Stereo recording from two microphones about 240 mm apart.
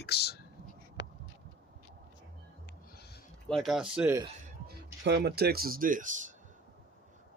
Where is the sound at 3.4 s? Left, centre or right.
Centre.